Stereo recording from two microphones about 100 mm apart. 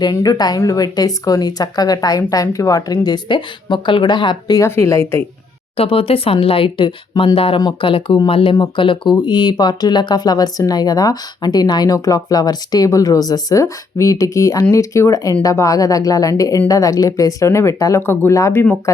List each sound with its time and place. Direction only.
0.0 s speech: 40° left (ahead or behind)
4.6 s speech: 30° left (ahead or behind)
5.7 s speech: 70° left (ahead or behind)
8.5 s speech: 50° left (ahead or behind); by 18.6 s 30° left (ahead or behind)